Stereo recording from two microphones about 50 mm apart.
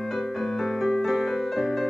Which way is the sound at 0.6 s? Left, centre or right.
Centre.